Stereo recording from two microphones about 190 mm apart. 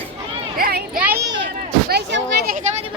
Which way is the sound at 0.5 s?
50° right (ahead or behind).